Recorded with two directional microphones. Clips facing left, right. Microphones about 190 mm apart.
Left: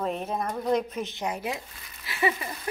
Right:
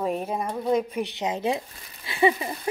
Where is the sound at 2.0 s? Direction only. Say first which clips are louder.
Right 6 dB; 25° right (ahead or behind).